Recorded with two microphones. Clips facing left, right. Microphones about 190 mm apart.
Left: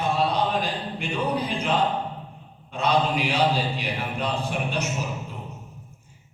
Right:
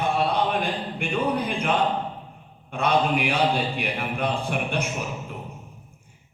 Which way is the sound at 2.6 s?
55° right (ahead or behind).